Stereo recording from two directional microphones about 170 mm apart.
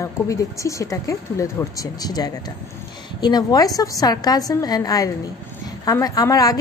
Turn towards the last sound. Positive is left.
turn(degrees=20)  # may be behind; listen again after turning